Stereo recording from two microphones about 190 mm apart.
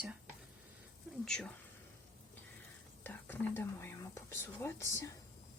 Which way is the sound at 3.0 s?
10° left (ahead or behind).